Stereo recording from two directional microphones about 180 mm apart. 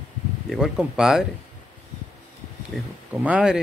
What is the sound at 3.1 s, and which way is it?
Speech, 5° right (ahead or behind).